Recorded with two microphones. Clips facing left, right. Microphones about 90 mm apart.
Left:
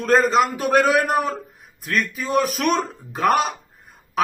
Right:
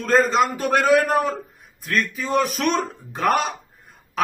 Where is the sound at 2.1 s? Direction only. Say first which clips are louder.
Left 1 dB; centre (ahead or behind).